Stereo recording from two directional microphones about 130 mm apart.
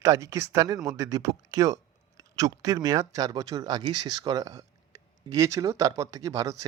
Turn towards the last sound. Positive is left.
turn(degrees=-25)  # may be behind; listen again after turning